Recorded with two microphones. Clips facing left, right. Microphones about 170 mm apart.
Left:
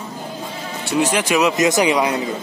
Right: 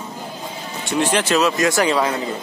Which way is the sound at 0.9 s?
10° left (ahead or behind).